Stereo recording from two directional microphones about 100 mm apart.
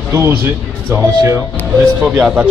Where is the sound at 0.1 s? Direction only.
25° right (ahead or behind).